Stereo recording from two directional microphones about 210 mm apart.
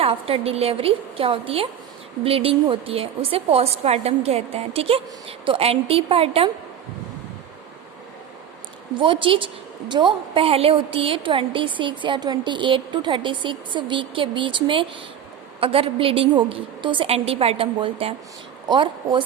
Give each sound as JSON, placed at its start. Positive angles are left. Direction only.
{"t": 0.0, "sound": "a woman's voice", "side_deg": -25}
{"t": 9.0, "sound": "a woman's voice", "side_deg": -25}